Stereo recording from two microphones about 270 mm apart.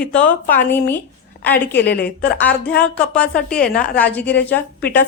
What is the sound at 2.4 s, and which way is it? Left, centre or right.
A woman's voice, centre.